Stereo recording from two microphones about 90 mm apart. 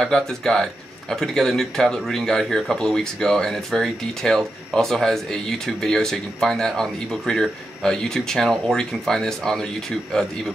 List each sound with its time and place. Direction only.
0.0 s speech: 5° left (ahead or behind)